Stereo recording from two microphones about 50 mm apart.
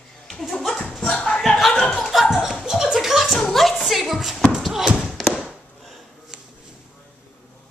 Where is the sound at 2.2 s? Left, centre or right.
Centre.